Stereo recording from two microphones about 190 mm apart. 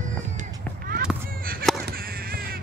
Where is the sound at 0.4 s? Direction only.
50° right (ahead or behind).